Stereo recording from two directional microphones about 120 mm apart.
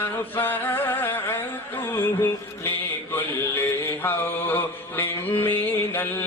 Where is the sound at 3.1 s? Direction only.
20° left (ahead or behind).